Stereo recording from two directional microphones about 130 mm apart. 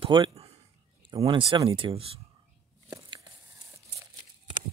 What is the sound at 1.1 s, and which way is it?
Speech, 30° right (ahead or behind).